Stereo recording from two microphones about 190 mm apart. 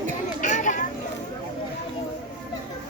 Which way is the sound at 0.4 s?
40° left (ahead or behind).